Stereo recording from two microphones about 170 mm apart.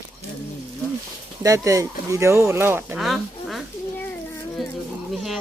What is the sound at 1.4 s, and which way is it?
Speech, 20° right (ahead or behind).